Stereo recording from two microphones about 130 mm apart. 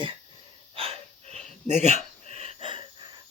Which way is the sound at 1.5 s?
60° right (ahead or behind).